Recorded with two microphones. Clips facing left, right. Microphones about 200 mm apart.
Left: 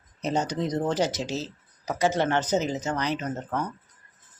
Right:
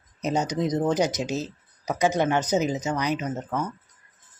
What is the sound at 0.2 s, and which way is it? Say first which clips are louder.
Speech: right 2 dB; 10° right (ahead or behind).